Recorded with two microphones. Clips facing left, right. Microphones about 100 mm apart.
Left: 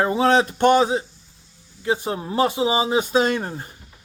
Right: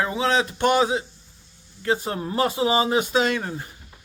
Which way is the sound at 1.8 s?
20° left (ahead or behind).